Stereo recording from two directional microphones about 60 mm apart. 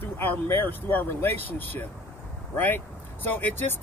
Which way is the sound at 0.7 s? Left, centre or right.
Left.